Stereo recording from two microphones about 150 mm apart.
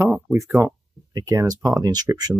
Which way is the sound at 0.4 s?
15° right (ahead or behind).